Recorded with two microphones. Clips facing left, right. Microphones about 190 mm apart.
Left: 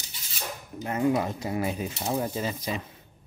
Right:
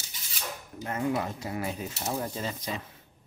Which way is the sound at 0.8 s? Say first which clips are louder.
Left 4 dB; 20° left (ahead or behind).